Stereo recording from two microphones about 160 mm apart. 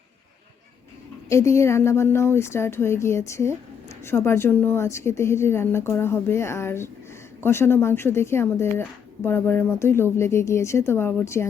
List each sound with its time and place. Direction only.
1.3 s speech: 15° left (ahead or behind)